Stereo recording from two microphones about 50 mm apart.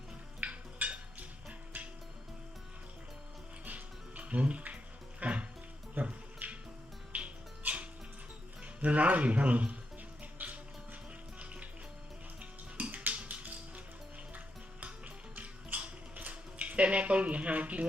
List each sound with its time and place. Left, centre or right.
0.3 s music: right
1.7 s music: right
3.7 s music: right
6.0 s speech: right
6.4 s music: right
7.1 s music: right
8.6 s speech: right
10.3 s music: right
12.4 s music: right